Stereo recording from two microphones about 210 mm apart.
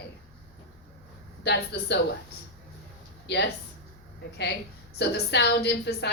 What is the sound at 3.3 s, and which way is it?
Speech, 50° left (ahead or behind).